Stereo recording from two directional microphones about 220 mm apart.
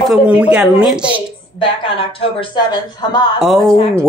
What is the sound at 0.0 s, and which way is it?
Music, 5° right (ahead or behind).